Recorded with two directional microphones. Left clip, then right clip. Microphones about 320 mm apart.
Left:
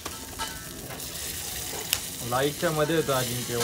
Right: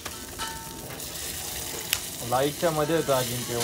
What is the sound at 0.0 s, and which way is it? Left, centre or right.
Music, centre.